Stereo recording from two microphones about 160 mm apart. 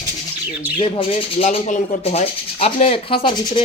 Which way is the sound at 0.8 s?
35° left (ahead or behind).